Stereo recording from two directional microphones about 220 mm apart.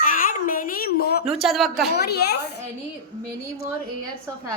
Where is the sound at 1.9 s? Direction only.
45° left (ahead or behind).